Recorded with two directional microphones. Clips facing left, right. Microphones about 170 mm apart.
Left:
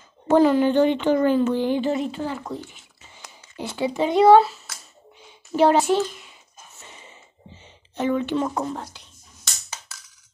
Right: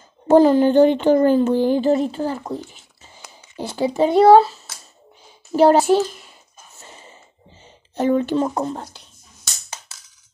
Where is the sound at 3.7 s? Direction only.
35° right (ahead or behind).